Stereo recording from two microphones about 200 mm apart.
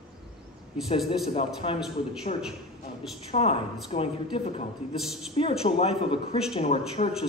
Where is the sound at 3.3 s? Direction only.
30° left (ahead or behind).